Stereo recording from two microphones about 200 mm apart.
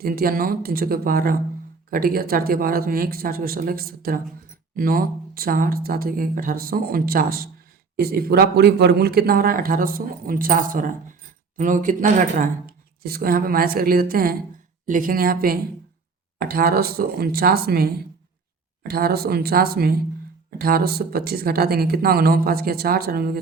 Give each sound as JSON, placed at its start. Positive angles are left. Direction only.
{"t": 0.0, "sound": "a man's voice", "side_deg": -45}